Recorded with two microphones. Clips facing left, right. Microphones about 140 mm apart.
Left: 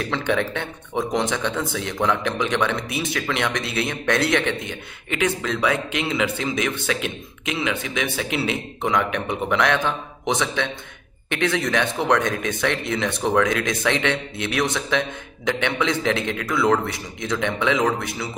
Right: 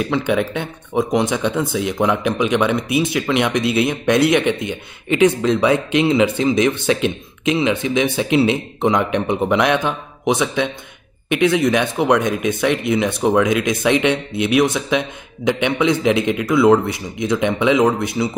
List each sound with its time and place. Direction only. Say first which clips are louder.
0.1 s speech: right 4 dB; 10° right (ahead or behind)